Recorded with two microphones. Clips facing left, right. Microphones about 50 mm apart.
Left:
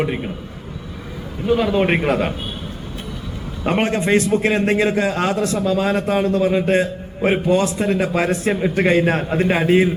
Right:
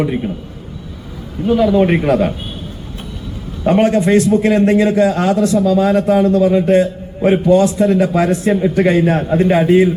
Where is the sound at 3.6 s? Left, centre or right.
Left.